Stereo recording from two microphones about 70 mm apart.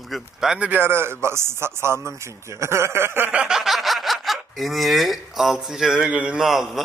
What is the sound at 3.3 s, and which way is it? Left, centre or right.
Speech, centre.